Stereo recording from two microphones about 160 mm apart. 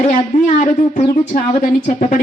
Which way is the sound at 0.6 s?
50° left (ahead or behind).